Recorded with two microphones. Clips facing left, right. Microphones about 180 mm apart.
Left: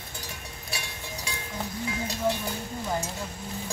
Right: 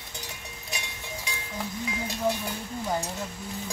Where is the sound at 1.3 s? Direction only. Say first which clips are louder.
Left 2 dB; 15° right (ahead or behind).